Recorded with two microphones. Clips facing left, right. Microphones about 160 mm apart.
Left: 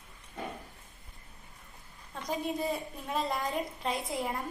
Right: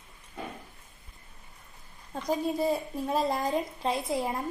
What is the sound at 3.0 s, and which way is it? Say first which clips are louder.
A woman's voice: right 4 dB; 35° right (ahead or behind).